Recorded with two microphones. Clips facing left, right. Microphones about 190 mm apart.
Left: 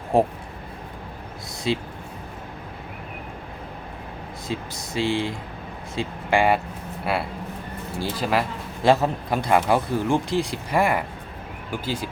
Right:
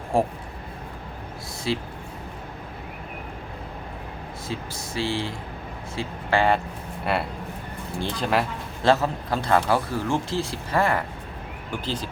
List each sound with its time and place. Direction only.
0.1 s speech: 20° left (ahead or behind)
1.7 s speech: 20° left (ahead or behind)
4.4 s a man's voice: 15° left (ahead or behind)
7.0 s speech: centre (ahead or behind)
8.8 s a man's voice: 15° left (ahead or behind)